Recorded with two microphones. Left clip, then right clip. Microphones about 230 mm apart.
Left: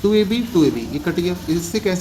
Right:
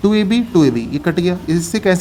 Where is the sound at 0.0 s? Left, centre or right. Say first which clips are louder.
Right 1 dB; right.